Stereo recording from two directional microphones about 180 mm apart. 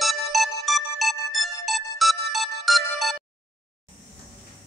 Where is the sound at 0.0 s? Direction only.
Centre (ahead or behind).